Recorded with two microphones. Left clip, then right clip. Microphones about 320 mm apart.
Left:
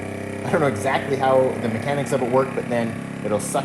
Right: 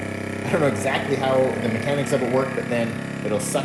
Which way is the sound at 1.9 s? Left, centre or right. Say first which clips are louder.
Even; centre.